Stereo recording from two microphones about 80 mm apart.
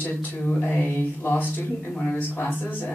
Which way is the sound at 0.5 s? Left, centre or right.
Centre.